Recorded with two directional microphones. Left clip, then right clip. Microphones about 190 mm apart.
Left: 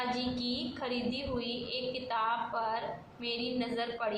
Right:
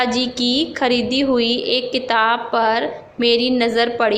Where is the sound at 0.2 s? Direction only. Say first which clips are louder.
Right 17 dB; 40° right (ahead or behind).